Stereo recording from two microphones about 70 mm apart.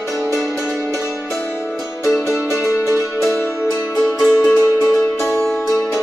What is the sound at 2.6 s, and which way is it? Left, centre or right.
Music, left.